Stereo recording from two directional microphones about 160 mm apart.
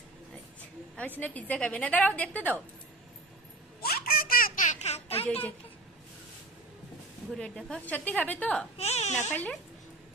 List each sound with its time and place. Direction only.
0.6 s a woman's voice: 10° left (ahead or behind)
3.8 s baby laughter: 75° left (ahead or behind); by 5.2 s 40° left (ahead or behind)
7.3 s a woman's voice: 5° left (ahead or behind)
8.8 s baby cry: 40° left (ahead or behind)
9.3 s speech: 5° left (ahead or behind)